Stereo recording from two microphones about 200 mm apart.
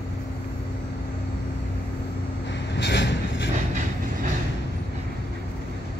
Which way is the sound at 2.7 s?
65° left (ahead or behind).